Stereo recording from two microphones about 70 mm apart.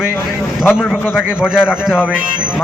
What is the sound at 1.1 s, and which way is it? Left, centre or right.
Speech, centre.